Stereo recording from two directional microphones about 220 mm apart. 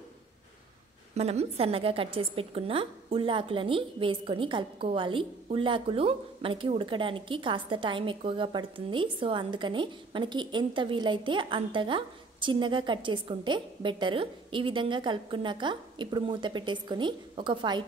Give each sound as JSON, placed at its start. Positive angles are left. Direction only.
{"t": 1.1, "sound": "a woman's voice", "side_deg": -30}